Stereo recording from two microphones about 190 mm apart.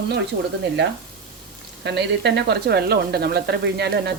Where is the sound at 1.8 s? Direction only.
60° right (ahead or behind).